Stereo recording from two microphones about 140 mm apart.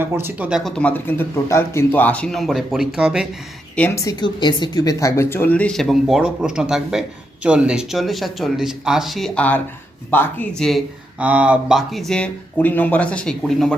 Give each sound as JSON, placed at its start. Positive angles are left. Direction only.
{"t": 0.0, "sound": "speech", "side_deg": -15}
{"t": 0.6, "sound": "speech", "side_deg": 5}
{"t": 3.8, "sound": "speech", "side_deg": 15}
{"t": 4.0, "sound": "speech", "side_deg": 30}
{"t": 10.6, "sound": "speech", "side_deg": 0}
{"t": 11.2, "sound": "speech", "side_deg": -10}